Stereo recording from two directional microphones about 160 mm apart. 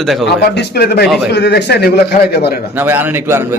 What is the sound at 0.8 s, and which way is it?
Speech, 90° left.